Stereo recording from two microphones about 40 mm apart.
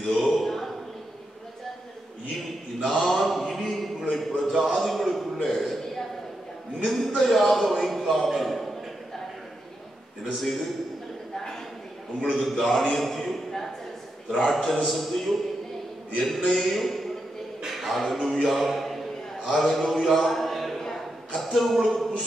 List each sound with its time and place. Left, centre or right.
0.2 s a sound: centre
3.0 s mantra: centre
4.1 s a sound: centre
10.3 s a man's voice: centre
12.2 s a man's voice: left
12.4 s a man's voice: centre
16.4 s a man's voice: centre
20.1 s a sound: centre
21.5 s a man's voice: centre